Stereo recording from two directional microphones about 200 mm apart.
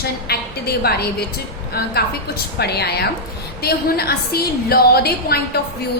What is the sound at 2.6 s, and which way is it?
A woman's voice, 55° left (ahead or behind).